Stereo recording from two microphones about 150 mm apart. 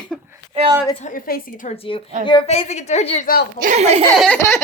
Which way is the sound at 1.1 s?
70° left (ahead or behind).